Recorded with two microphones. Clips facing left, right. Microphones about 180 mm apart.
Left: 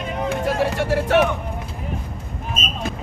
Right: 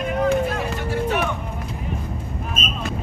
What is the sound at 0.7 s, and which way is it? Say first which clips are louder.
Speech: left 6 dB; 90° left.